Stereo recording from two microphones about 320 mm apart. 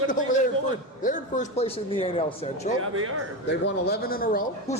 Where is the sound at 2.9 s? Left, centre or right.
Right.